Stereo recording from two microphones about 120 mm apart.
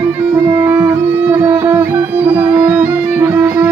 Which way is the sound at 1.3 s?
15° right (ahead or behind).